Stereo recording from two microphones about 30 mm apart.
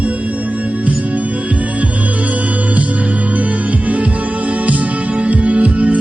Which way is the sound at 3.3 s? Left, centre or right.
Right.